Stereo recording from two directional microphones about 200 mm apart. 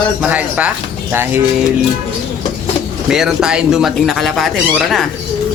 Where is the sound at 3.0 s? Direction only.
5° right (ahead or behind).